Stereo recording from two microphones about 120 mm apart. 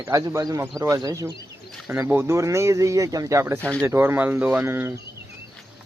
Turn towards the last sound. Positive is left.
turn(degrees=-20)  # may be behind; listen again after turning